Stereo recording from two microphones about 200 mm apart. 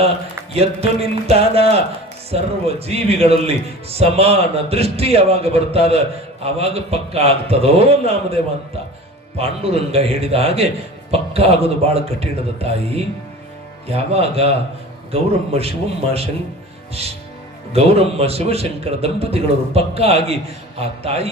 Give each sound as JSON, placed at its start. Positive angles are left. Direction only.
{"t": 0.5, "sound": "a man's voice", "side_deg": -30}
{"t": 9.4, "sound": "a man's voice", "side_deg": -30}
{"t": 17.7, "sound": "a man's voice", "side_deg": -30}